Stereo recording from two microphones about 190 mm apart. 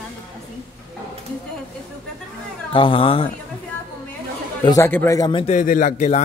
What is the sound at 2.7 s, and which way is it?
Speech, 25° left (ahead or behind).